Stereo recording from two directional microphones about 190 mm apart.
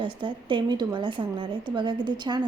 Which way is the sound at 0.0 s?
25° right (ahead or behind).